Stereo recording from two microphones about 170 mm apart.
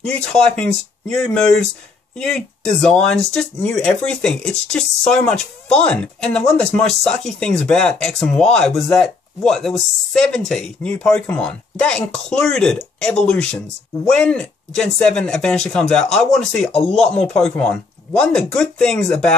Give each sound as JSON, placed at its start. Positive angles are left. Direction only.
{"t": 0.0, "sound": "speech", "side_deg": 5}